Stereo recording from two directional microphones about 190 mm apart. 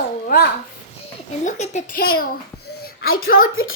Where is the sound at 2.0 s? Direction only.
50° left (ahead or behind).